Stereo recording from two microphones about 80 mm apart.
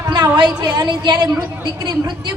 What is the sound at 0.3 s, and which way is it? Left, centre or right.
A woman's voice, right.